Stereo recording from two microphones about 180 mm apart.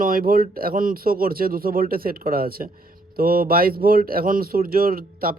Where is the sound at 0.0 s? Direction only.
50° right (ahead or behind).